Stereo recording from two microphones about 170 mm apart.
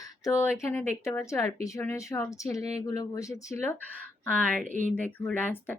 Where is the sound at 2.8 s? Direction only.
20° left (ahead or behind).